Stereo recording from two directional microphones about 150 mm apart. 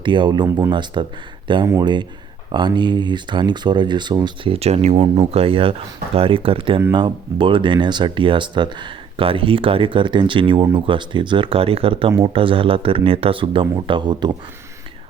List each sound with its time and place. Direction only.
0.0 s speech: 30° right (ahead or behind)
0.4 s speech: 15° right (ahead or behind)
0.7 s speech: 30° right (ahead or behind)